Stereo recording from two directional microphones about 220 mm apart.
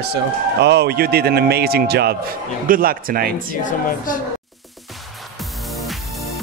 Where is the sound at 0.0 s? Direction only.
50° right (ahead or behind).